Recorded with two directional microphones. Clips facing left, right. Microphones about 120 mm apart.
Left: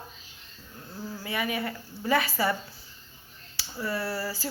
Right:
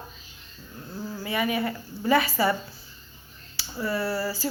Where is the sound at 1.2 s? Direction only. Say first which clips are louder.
Right 4 dB; 15° right (ahead or behind).